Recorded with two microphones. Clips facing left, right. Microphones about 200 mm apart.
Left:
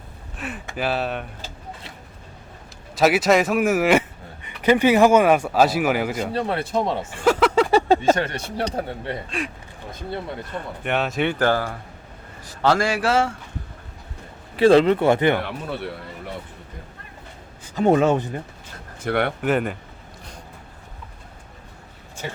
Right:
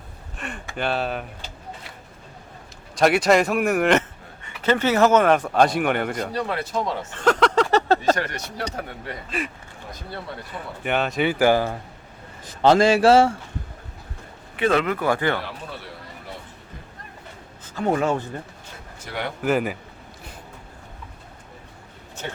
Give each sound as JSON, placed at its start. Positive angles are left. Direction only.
{"t": 0.3, "sound": "speech", "side_deg": 5}
{"t": 2.9, "sound": "speech", "side_deg": 5}
{"t": 6.3, "sound": "speech", "side_deg": 30}
{"t": 7.1, "sound": "a sound", "side_deg": 10}
{"t": 8.1, "sound": "speech", "side_deg": 25}
{"t": 9.4, "sound": "a man's voice", "side_deg": 0}
{"t": 14.5, "sound": "speech", "side_deg": 30}
{"t": 17.7, "sound": "speech", "side_deg": 20}
{"t": 19.0, "sound": "speech", "side_deg": 60}
{"t": 19.4, "sound": "speech", "side_deg": 0}